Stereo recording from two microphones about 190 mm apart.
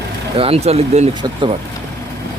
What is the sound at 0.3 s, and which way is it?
Speech, 30° right (ahead or behind).